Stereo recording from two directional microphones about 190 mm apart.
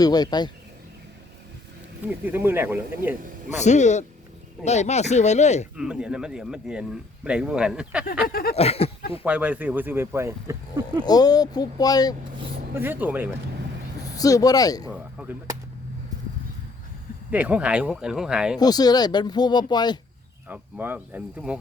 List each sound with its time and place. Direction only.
0.0 s speech: 20° left (ahead or behind)
2.0 s speech: 10° right (ahead or behind)
3.6 s speech: 40° left (ahead or behind)
5.7 s speech: 5° right (ahead or behind)
8.3 s a sound: 50° left (ahead or behind)
8.5 s speech: 30° left (ahead or behind)
9.2 s speech: 10° right (ahead or behind)
11.0 s speech: 20° left (ahead or behind)
12.7 s speech: 10° right (ahead or behind)
14.2 s speech: 20° left (ahead or behind)
14.8 s speech: 5° right (ahead or behind)
17.3 s speech: 5° right (ahead or behind)
18.5 s speech: 20° left (ahead or behind)
20.5 s speech: 10° right (ahead or behind)